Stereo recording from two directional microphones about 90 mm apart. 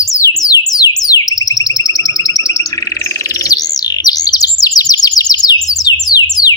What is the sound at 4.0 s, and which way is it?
Chirp, 45° left (ahead or behind).